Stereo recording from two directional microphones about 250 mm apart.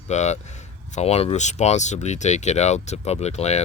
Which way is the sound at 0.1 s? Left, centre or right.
Left.